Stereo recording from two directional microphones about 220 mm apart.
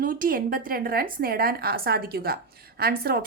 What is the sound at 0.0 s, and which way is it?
A woman's voice, 40° right (ahead or behind).